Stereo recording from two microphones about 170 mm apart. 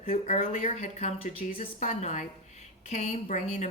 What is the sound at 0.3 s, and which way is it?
Speech, 40° left (ahead or behind).